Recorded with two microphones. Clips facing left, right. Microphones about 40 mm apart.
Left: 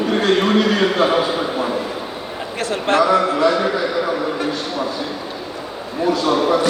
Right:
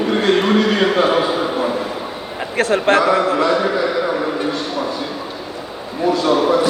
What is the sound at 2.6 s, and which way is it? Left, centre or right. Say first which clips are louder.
Speech: right 3 dB; right.